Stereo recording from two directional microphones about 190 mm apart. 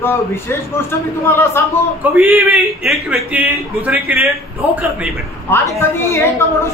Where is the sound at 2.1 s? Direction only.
10° right (ahead or behind).